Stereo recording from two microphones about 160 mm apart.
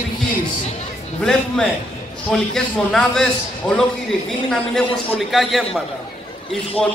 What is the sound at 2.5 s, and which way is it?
A man's voice, 5° left (ahead or behind).